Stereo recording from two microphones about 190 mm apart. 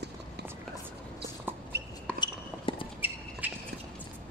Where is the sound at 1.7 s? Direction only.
60° right (ahead or behind).